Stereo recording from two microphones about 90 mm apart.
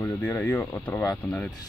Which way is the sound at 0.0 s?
20° left (ahead or behind).